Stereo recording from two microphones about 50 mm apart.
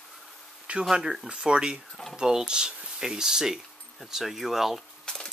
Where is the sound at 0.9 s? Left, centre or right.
Centre.